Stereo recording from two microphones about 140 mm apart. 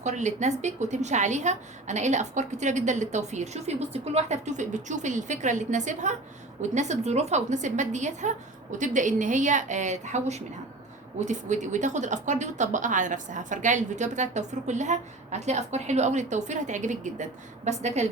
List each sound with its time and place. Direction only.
0.0 s a woman's voice: 55° right (ahead or behind)